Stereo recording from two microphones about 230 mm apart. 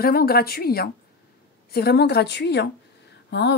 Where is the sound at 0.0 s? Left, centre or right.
Left.